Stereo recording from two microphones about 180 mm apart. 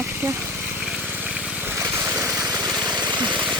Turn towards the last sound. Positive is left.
turn(degrees=-25)  # may be behind; listen again after turning